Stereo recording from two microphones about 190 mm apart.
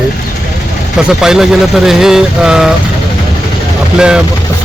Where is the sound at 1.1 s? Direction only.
Centre (ahead or behind).